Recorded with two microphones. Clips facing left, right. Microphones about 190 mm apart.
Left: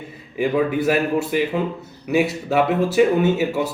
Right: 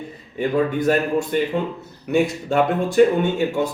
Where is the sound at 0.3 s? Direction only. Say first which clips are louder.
Left 1 dB; 5° left (ahead or behind).